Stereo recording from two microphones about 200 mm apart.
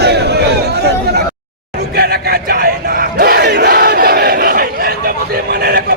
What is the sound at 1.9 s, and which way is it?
Crowd, 55° right (ahead or behind).